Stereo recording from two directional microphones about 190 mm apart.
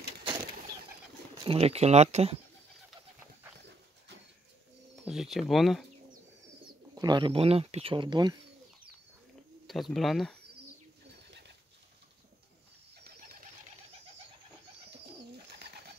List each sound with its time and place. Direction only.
1.4 s speech: 30° right (ahead or behind)
5.0 s speech: centre (ahead or behind)
6.6 s speech: 25° right (ahead or behind)
9.7 s speech: centre (ahead or behind)
11.2 s pigeon: 65° right (ahead or behind)
14.9 s bird: 60° right (ahead or behind)